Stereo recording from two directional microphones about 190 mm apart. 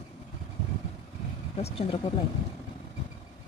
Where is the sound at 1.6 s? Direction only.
30° left (ahead or behind).